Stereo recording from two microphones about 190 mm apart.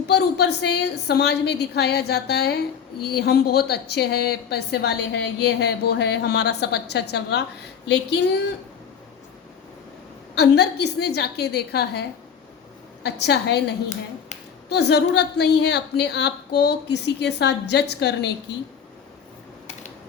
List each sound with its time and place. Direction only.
0.1 s a woman's voice: 60° left (ahead or behind)
10.3 s a woman's voice: 60° left (ahead or behind)